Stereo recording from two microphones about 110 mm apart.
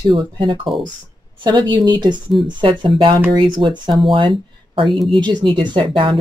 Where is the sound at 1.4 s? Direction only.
40° right (ahead or behind).